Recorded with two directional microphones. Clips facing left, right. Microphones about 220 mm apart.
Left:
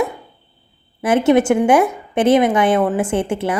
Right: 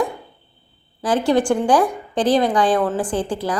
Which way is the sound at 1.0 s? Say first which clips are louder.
Left 4 dB; 25° left (ahead or behind).